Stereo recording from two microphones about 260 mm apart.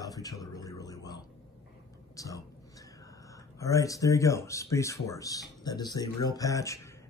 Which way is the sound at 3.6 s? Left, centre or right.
Centre.